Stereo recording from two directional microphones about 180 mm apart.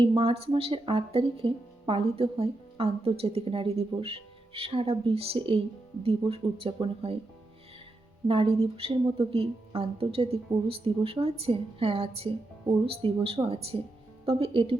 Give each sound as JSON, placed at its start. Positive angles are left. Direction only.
{"t": 0.2, "sound": "speech", "side_deg": -30}
{"t": 8.3, "sound": "speech", "side_deg": -30}